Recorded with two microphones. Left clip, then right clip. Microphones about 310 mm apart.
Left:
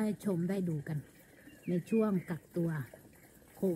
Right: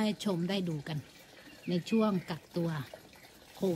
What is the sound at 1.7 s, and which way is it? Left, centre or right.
Speech, right.